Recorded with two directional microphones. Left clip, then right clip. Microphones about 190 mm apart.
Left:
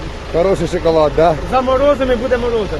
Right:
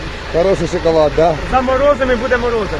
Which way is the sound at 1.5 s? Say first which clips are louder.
Even; 40° left (ahead or behind).